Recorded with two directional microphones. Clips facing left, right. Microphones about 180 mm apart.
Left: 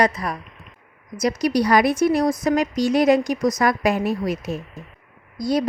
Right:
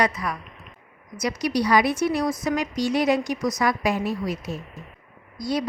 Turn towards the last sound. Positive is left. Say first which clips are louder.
# left 5 dB
turn(degrees=45)  # may be behind; listen again after turning